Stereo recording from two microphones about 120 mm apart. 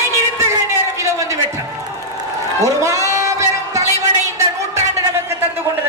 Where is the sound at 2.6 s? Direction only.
25° right (ahead or behind).